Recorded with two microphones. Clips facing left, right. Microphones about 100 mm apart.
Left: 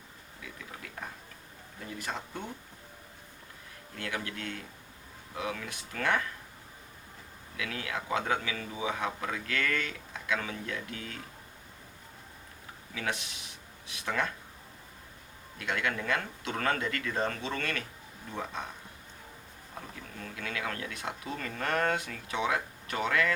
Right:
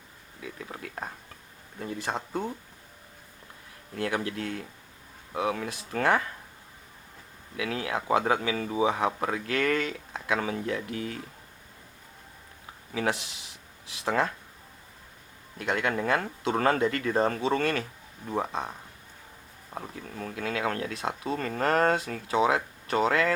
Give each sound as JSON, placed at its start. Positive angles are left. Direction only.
{"t": 0.6, "sound": "speech", "side_deg": -40}
{"t": 3.9, "sound": "speech", "side_deg": -30}
{"t": 7.5, "sound": "speech", "side_deg": -30}
{"t": 12.9, "sound": "speech", "side_deg": -30}
{"t": 15.5, "sound": "speech", "side_deg": -35}
{"t": 19.7, "sound": "speech", "side_deg": -35}